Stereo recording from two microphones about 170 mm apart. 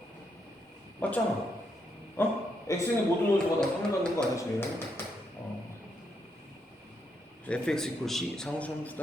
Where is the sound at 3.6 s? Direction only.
5° left (ahead or behind).